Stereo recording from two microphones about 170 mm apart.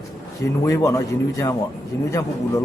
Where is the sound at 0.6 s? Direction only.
20° left (ahead or behind).